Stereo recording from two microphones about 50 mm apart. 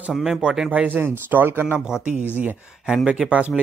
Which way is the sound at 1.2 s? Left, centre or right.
Right.